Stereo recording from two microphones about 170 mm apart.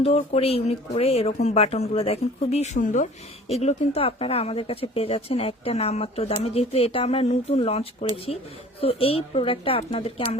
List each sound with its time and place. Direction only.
0.0 s speech: 35° left (ahead or behind)